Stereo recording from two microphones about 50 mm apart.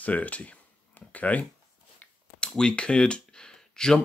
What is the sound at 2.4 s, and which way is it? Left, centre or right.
Speech, centre.